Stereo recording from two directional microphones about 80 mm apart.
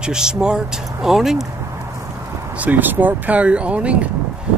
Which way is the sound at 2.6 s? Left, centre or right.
Right.